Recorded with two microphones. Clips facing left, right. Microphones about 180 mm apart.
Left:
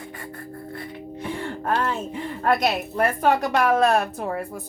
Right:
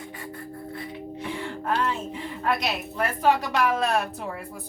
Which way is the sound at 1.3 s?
50° left (ahead or behind).